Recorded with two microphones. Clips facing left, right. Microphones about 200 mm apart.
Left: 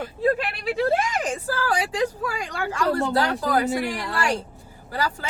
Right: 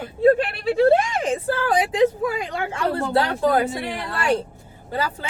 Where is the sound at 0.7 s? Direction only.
30° right (ahead or behind).